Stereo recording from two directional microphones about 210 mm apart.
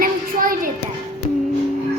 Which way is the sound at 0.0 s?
40° right (ahead or behind).